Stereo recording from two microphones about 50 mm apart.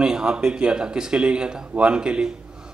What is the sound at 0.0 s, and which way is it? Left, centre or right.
A man's voice, centre.